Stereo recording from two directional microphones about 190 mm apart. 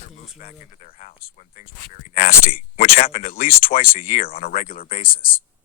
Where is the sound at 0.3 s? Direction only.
40° left (ahead or behind).